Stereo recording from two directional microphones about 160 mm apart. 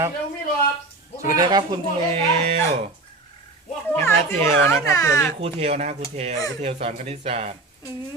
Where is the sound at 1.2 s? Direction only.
20° right (ahead or behind).